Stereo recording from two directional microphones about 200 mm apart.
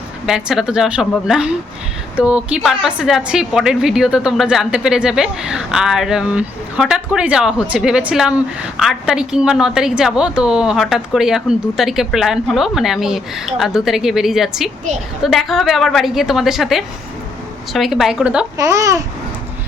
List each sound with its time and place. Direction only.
0.3 s a woman's voice: 5° right (ahead or behind)
18.5 s speech: 15° right (ahead or behind)